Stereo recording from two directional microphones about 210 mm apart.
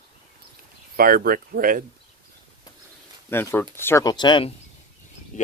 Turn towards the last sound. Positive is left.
turn(degrees=20)  # may be behind; listen again after turning